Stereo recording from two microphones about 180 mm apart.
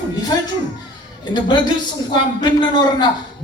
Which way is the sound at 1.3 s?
25° left (ahead or behind).